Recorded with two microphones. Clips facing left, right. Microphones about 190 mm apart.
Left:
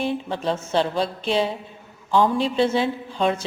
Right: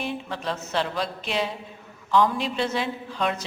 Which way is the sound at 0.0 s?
30° left (ahead or behind).